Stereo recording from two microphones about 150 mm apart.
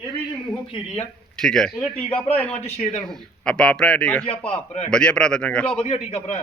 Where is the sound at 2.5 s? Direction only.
45° left (ahead or behind).